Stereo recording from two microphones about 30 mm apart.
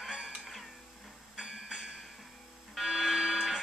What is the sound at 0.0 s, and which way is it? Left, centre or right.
Music, centre.